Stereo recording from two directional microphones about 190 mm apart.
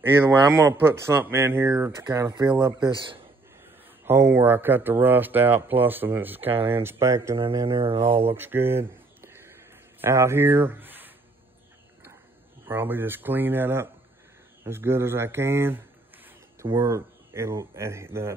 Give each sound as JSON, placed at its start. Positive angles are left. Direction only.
{"t": 0.2, "sound": "speech", "side_deg": -15}
{"t": 4.0, "sound": "speech", "side_deg": -10}
{"t": 7.3, "sound": "speech", "side_deg": -25}
{"t": 8.0, "sound": "speech", "side_deg": -10}
{"t": 8.4, "sound": "a sound", "side_deg": -10}
{"t": 10.0, "sound": "speech", "side_deg": -15}
{"t": 12.6, "sound": "speech", "side_deg": -10}